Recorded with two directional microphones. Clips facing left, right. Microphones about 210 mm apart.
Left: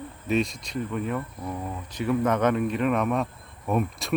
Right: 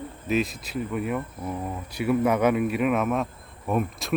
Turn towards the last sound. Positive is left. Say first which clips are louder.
# even
turn(degrees=0)  # may be behind; listen again after turning